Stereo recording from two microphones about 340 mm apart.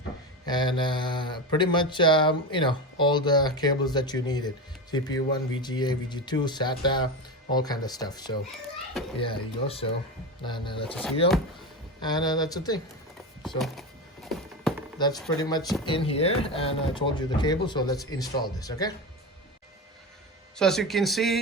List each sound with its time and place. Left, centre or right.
0.4 s speech: centre
11.9 s speech: centre
14.3 s a sound: centre
14.9 s speech: centre
20.6 s speech: centre